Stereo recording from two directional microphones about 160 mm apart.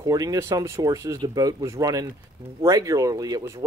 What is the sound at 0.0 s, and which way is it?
Speech, 20° right (ahead or behind).